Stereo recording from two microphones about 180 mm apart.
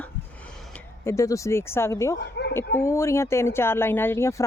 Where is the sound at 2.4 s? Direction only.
65° left (ahead or behind).